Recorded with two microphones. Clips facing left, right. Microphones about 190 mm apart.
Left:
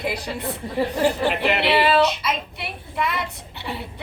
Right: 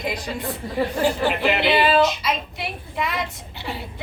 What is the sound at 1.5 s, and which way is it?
Speech, 65° left (ahead or behind).